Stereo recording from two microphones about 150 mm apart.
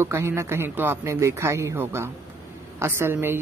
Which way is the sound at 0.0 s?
15° right (ahead or behind).